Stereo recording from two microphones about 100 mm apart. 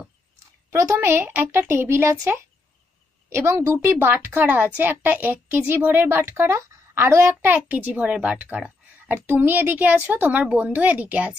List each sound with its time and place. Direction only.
0.7 s a woman's voice: 30° right (ahead or behind); by 11.3 s 15° right (ahead or behind)